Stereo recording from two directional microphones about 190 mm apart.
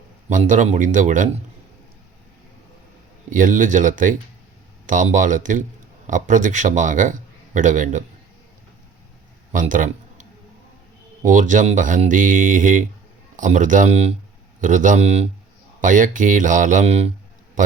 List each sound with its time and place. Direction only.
0.3 s a man's voice: 40° right (ahead or behind)
3.2 s a man's voice: 45° right (ahead or behind)
9.5 s a man's voice: 45° right (ahead or behind)